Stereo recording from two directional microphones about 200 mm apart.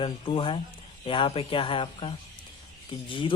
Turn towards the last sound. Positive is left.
turn(degrees=25)  # may be behind; listen again after turning